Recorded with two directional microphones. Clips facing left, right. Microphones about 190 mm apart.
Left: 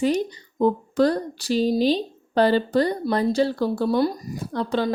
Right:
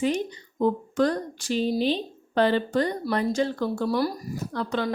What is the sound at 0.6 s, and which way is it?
Speech, 35° left (ahead or behind).